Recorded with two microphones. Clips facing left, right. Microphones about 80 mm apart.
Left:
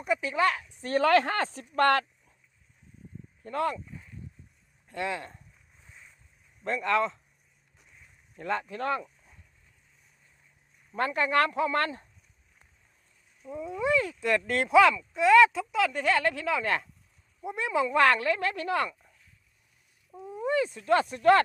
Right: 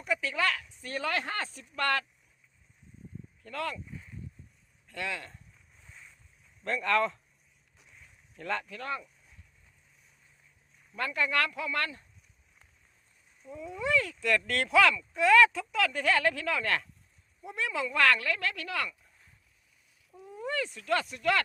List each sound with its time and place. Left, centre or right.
0.0 s a sound: left
0.9 s speech: left
3.4 s speech: left
4.9 s speech: left
5.8 s boat: centre
6.6 s speech: centre
7.8 s vehicle: centre
8.4 s speech: centre
8.6 s speech: left
8.9 s a sound: left
10.9 s speech: left
13.5 s speech: left
20.2 s speech: left